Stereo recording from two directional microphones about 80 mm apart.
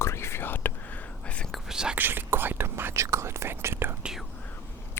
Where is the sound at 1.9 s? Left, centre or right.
Right.